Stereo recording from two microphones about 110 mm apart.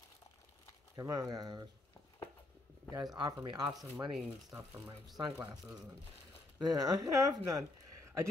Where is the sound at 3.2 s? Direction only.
45° right (ahead or behind).